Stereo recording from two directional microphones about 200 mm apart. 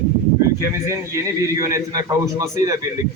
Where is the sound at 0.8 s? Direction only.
15° right (ahead or behind).